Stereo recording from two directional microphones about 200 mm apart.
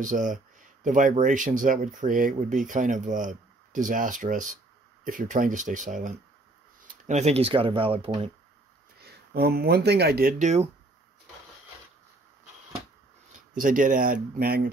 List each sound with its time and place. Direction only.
0.0 s speech: 40° right (ahead or behind); by 8.3 s 25° right (ahead or behind)
9.0 s speech: 50° right (ahead or behind)
10.4 s speech: 35° right (ahead or behind)
13.6 s speech: 40° right (ahead or behind)